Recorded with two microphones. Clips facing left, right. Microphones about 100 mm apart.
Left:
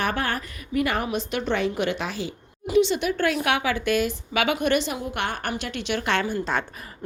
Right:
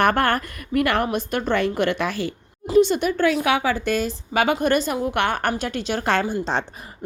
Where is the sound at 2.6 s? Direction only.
45° right (ahead or behind).